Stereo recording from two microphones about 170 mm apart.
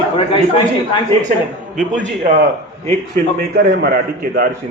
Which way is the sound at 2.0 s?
50° right (ahead or behind).